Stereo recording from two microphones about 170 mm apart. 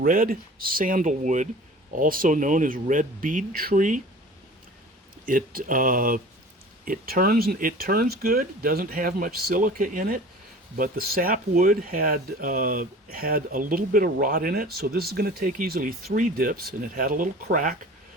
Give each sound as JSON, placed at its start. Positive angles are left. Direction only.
{"t": 0.0, "sound": "speech", "side_deg": -55}
{"t": 5.2, "sound": "speech", "side_deg": -55}